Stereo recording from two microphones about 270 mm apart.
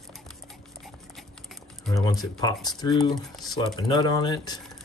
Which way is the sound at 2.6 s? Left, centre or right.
Centre.